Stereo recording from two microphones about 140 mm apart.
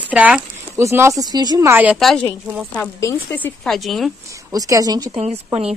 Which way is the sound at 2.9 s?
20° left (ahead or behind).